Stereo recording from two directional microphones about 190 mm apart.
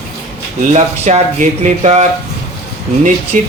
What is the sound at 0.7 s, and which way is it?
Speech, 35° right (ahead or behind).